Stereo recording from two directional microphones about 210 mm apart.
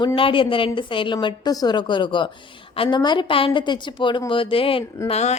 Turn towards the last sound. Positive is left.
turn(degrees=30)  # may be behind; listen again after turning